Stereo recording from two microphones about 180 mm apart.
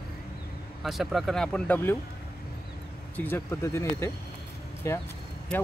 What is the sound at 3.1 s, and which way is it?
Speech, 10° left (ahead or behind).